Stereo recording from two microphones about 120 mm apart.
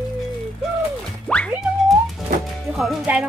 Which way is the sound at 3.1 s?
15° right (ahead or behind).